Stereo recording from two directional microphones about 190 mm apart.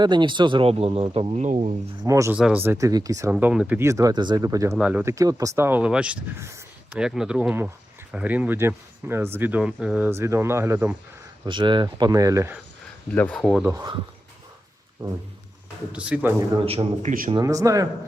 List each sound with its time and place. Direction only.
0.0 s a man's voice: 25° right (ahead or behind)
2.0 s speech: 15° right (ahead or behind)
3.3 s speech: 5° right (ahead or behind)
11.4 s a man's voice: 25° right (ahead or behind)
13.1 s speech: 5° left (ahead or behind)
15.9 s speech: 5° right (ahead or behind)
16.6 s a man's voice: 35° right (ahead or behind)
17.3 s speech: 20° right (ahead or behind)